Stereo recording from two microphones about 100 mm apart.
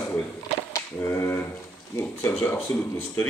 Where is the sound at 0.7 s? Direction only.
30° left (ahead or behind).